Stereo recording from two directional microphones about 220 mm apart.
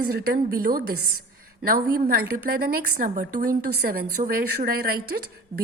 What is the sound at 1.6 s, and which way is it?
A woman's voice, 40° right (ahead or behind).